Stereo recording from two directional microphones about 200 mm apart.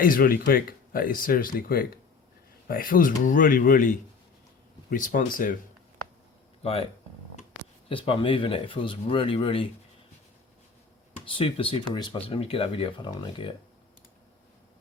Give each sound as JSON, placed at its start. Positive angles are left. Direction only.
{"t": 0.0, "sound": "speech", "side_deg": 45}
{"t": 6.6, "sound": "speech", "side_deg": 30}
{"t": 7.9, "sound": "speech", "side_deg": 25}
{"t": 11.3, "sound": "speech", "side_deg": 25}